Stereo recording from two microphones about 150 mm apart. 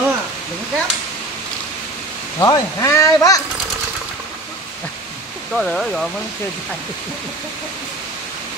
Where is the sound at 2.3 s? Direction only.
20° left (ahead or behind).